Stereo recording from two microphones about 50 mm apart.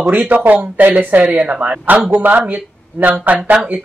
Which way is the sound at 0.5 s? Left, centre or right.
Right.